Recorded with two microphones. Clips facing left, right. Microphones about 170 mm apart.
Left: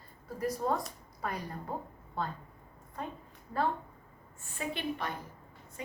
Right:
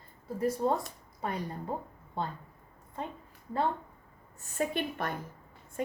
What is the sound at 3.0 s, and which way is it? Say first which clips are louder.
Speech: right 1 dB; 25° right (ahead or behind).